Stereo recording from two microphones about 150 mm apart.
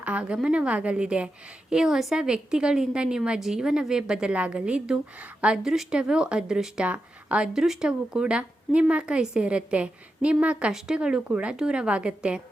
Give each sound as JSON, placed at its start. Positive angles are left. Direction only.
{"t": 0.0, "sound": "a woman's voice", "side_deg": -10}